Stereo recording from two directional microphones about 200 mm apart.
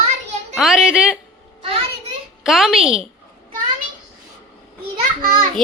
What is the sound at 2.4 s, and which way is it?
Speech, centre (ahead or behind).